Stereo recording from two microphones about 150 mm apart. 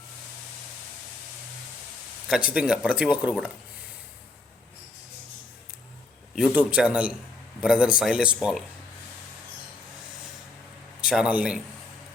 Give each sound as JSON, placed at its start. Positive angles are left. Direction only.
{"t": 2.2, "sound": "speech", "side_deg": -5}
{"t": 6.3, "sound": "speech", "side_deg": -5}
{"t": 11.0, "sound": "a man's voice", "side_deg": -5}